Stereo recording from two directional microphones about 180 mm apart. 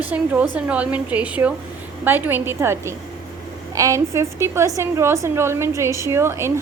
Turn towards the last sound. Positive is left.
turn(degrees=-15)  # may be behind; listen again after turning